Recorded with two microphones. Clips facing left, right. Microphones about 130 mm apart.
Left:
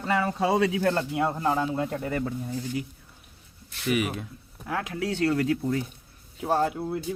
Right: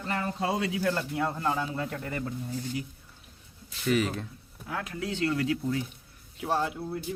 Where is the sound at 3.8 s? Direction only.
10° left (ahead or behind).